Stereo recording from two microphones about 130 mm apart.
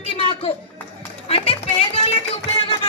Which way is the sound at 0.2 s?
45° left (ahead or behind).